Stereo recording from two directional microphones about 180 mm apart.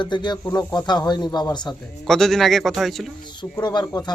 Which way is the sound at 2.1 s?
Centre (ahead or behind).